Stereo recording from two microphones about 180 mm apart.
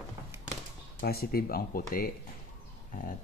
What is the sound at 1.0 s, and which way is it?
Speech, 60° left (ahead or behind).